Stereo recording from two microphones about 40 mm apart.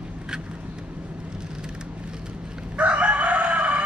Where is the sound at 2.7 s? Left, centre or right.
Right.